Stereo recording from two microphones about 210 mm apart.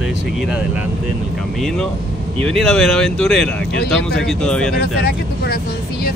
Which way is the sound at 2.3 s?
5° left (ahead or behind).